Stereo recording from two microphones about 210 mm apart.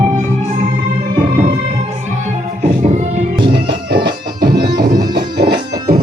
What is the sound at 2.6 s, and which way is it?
Music, 35° right (ahead or behind).